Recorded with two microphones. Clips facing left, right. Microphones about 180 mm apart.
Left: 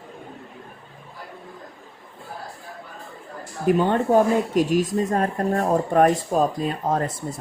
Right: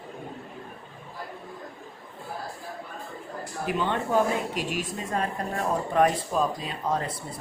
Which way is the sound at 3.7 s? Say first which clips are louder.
Left 9 dB; 45° left (ahead or behind).